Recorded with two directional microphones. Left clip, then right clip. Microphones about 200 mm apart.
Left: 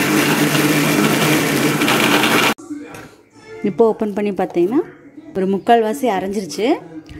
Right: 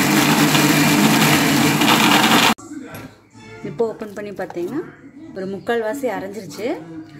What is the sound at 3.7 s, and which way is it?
A woman's voice, 40° left (ahead or behind).